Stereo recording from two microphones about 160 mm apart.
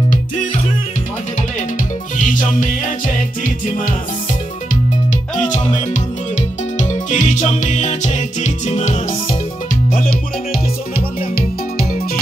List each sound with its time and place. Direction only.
2.1 s music: 55° left (ahead or behind)
5.5 s music: 50° left (ahead or behind)